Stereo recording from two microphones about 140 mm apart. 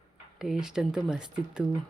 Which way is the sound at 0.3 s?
5° right (ahead or behind).